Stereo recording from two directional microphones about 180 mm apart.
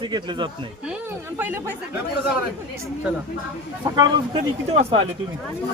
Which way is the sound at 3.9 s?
30° right (ahead or behind).